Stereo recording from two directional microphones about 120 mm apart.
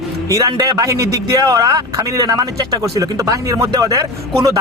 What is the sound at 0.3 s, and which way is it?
A man's voice, 30° right (ahead or behind).